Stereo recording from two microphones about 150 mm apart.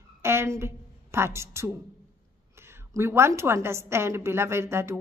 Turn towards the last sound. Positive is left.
turn(degrees=-15)  # may be behind; listen again after turning